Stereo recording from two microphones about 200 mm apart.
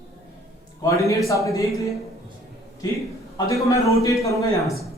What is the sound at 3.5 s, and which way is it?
A man's voice, 15° left (ahead or behind).